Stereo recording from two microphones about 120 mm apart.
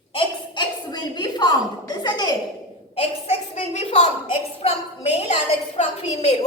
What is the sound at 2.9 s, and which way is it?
A woman's voice, 55° left (ahead or behind).